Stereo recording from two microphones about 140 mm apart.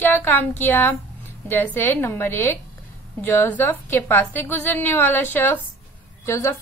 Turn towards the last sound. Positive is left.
turn(degrees=20)  # may be behind; listen again after turning